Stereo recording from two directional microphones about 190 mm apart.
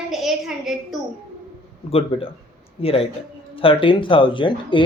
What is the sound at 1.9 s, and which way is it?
Speech, 30° left (ahead or behind).